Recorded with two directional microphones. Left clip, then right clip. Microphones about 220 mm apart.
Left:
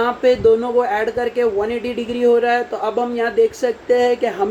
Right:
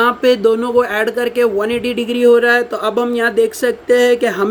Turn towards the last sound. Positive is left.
turn(degrees=-45)  # may be behind; listen again after turning